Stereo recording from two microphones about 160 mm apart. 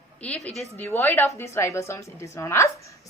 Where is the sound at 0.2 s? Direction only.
10° left (ahead or behind).